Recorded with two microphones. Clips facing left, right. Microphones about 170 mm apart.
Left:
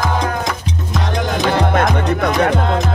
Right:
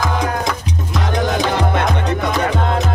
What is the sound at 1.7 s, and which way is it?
Music, 65° left (ahead or behind).